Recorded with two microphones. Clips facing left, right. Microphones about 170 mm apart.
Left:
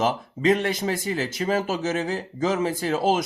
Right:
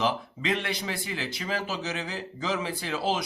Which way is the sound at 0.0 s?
45° left (ahead or behind).